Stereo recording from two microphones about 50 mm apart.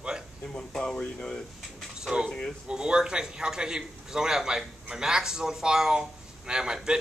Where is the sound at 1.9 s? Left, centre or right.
Centre.